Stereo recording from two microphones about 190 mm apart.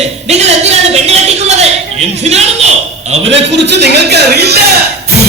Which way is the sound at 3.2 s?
70° right (ahead or behind).